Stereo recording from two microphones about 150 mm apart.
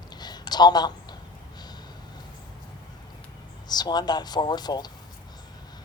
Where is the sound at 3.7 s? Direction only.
25° left (ahead or behind).